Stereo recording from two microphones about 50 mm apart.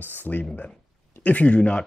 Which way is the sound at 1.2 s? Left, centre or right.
Left.